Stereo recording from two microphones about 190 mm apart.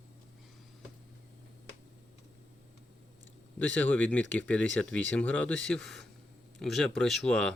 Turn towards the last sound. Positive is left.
turn(degrees=5)  # may be behind; listen again after turning